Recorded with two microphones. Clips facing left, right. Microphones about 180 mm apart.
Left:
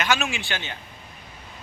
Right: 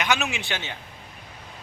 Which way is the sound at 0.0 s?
20° right (ahead or behind).